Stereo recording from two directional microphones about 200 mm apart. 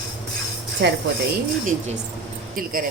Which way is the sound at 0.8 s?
60° right (ahead or behind).